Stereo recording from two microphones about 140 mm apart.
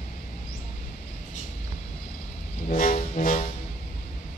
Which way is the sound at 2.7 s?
70° left (ahead or behind).